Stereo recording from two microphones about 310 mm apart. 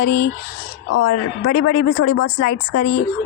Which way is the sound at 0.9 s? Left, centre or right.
Left.